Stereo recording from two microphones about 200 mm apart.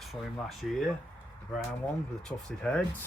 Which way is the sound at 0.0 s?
Centre (ahead or behind).